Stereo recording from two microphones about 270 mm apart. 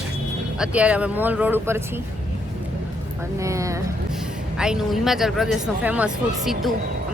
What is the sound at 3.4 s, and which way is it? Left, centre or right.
Speech, centre.